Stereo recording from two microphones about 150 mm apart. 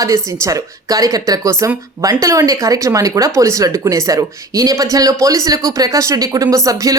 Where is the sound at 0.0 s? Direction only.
20° right (ahead or behind).